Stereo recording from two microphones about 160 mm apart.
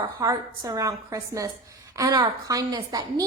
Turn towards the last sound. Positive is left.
turn(degrees=-25)  # may be behind; listen again after turning